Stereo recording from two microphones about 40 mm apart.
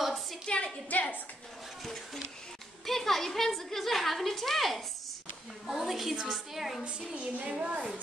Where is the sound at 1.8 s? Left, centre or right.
Centre.